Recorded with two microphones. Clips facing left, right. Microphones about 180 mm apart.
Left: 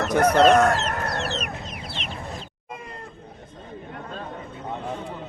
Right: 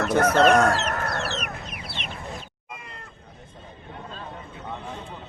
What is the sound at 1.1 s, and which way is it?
Chicken, 20° left (ahead or behind).